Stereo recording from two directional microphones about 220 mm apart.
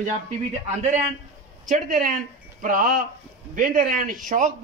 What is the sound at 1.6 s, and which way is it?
A man's voice, 35° right (ahead or behind).